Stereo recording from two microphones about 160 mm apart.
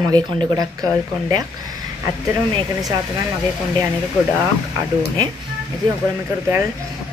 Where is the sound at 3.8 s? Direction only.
15° right (ahead or behind).